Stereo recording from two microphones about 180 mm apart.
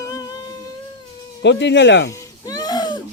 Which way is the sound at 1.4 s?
80° left.